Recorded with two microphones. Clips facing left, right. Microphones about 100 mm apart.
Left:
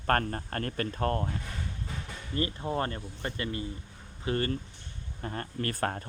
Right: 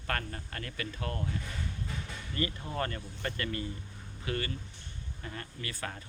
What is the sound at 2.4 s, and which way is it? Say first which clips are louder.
Speech: left 4 dB; 30° left (ahead or behind).